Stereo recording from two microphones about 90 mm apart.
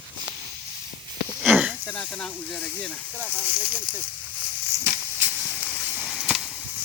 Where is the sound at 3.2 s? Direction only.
20° right (ahead or behind).